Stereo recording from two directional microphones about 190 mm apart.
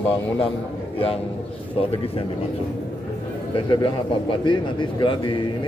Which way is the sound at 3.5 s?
25° left (ahead or behind).